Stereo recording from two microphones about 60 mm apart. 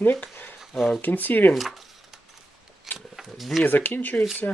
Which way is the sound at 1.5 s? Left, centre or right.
Centre.